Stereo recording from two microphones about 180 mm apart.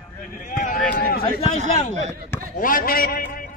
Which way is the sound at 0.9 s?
60° left (ahead or behind).